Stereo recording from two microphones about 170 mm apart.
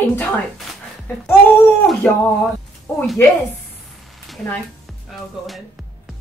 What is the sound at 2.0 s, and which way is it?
Speech, 5° left (ahead or behind).